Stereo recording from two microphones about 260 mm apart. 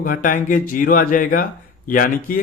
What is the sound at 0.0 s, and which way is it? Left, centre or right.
A man's voice, left.